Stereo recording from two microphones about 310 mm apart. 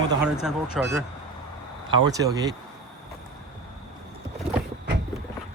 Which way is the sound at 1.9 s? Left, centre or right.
Centre.